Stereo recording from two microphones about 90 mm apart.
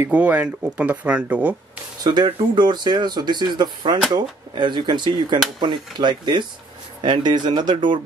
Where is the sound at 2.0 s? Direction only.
55° right (ahead or behind).